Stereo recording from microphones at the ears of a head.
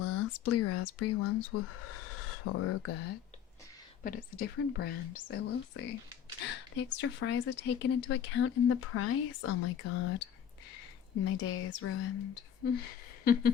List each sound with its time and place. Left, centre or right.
0.0 s speech: left